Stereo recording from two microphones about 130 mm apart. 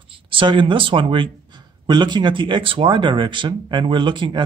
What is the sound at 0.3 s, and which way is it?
Speech, 40° right (ahead or behind).